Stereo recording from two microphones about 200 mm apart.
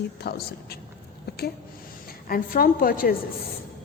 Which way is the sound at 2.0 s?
45° left (ahead or behind).